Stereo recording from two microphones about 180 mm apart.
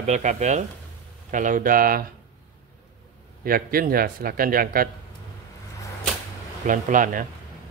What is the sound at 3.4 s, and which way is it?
Speech, 55° right (ahead or behind).